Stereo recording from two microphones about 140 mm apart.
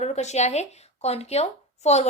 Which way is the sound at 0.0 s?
50° left (ahead or behind).